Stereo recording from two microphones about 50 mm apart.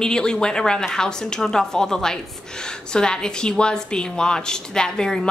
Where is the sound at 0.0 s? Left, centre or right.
Centre.